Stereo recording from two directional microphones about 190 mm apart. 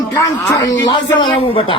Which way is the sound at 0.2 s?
15° left (ahead or behind).